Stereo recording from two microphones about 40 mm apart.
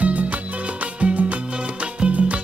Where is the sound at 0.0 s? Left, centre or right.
Right.